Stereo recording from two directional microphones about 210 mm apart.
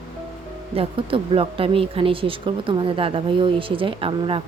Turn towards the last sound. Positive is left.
turn(degrees=-25)  # may be behind; listen again after turning